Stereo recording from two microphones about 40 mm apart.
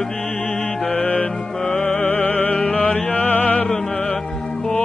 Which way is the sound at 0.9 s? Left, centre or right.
Left.